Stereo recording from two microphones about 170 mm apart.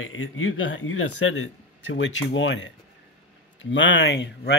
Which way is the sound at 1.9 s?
90° left.